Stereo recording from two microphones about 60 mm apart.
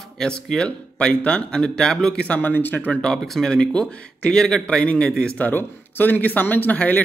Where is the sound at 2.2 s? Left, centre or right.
Left.